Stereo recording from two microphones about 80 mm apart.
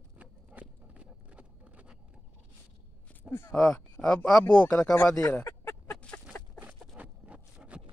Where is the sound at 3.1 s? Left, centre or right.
Left.